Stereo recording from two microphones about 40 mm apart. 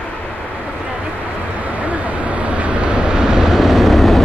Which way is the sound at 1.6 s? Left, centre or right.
Right.